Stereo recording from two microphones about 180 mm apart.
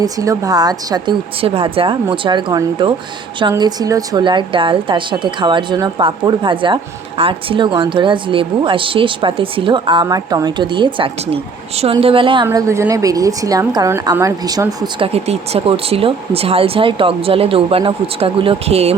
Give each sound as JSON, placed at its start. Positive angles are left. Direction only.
{"t": 0.0, "sound": "a woman's voice", "side_deg": -20}
{"t": 12.5, "sound": "a woman's voice", "side_deg": -15}